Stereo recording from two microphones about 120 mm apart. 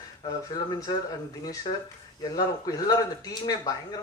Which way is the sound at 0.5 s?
35° left (ahead or behind).